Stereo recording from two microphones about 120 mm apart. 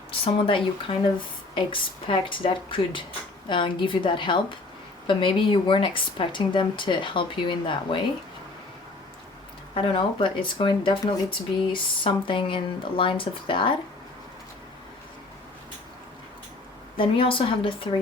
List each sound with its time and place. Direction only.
0.1 s speech: 50° left (ahead or behind)
9.7 s speech: 45° left (ahead or behind)
17.0 s speech: 45° left (ahead or behind)